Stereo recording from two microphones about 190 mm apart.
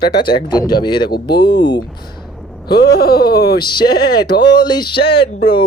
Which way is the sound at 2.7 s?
55° left (ahead or behind).